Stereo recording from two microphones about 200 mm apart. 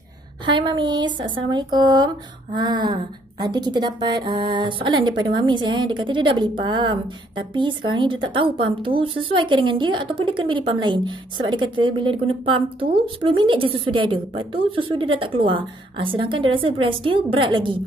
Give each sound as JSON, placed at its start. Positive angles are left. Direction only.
{"t": 0.5, "sound": "a woman's voice", "side_deg": -25}